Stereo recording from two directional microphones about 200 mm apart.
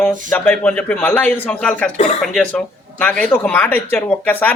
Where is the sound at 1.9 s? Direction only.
30° left (ahead or behind).